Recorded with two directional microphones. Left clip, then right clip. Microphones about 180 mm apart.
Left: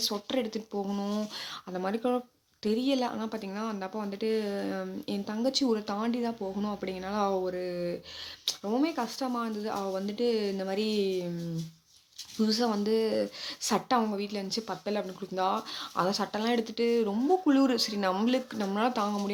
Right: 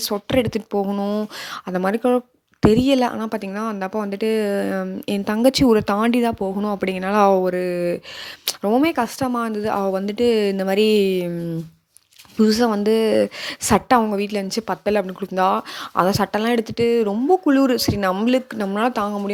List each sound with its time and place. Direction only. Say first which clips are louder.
0.0 s speech: right 11 dB; 40° right (ahead or behind)
0.9 s speech: right 11 dB; 30° right (ahead or behind)
1.6 s a woman's voice: right 12 dB; 40° right (ahead or behind)
12.4 s a woman's voice: right 11 dB; 40° right (ahead or behind)